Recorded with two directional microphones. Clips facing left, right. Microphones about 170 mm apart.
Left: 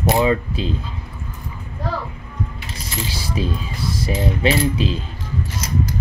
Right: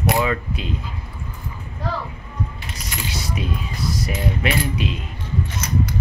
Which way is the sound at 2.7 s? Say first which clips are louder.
Left 2 dB; 30° left (ahead or behind).